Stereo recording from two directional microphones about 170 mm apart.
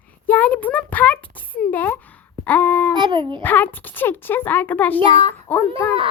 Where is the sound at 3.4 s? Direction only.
10° left (ahead or behind).